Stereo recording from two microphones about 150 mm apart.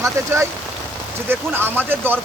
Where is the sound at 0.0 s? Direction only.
20° right (ahead or behind).